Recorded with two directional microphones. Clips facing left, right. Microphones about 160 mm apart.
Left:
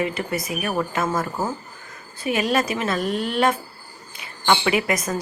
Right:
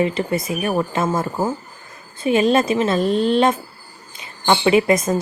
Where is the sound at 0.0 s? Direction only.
25° right (ahead or behind).